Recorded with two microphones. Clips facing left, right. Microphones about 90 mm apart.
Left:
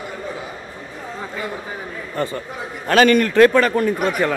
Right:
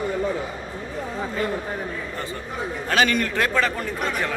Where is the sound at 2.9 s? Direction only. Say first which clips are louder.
Left 8 dB; 55° left (ahead or behind).